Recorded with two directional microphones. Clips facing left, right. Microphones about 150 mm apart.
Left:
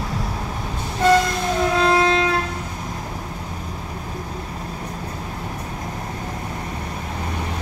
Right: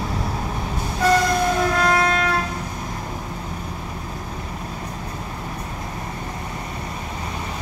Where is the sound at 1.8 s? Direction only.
25° left (ahead or behind).